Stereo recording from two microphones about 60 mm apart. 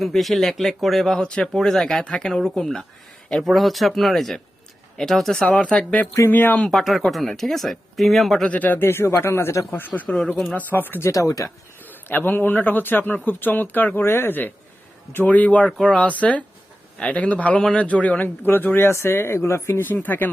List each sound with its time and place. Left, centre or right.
0.0 s speech: centre
1.5 s speech: centre
5.4 s speech: centre
6.3 s speech: left
6.7 s speech: centre
8.4 s speech: left
8.8 s speech: left
9.7 s speech: left
11.0 s speech: left
11.9 s speech: left
14.0 s speech: left
18.4 s speech: left
19.8 s speech: left